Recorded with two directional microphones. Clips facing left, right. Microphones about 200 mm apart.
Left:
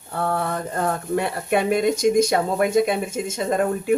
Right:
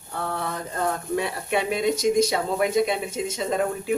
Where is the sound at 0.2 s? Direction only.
55° left (ahead or behind).